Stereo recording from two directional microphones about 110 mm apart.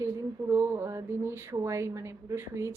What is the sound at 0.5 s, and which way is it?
Speech, 25° right (ahead or behind).